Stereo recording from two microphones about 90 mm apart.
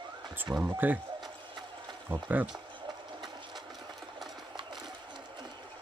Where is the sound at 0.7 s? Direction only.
20° right (ahead or behind).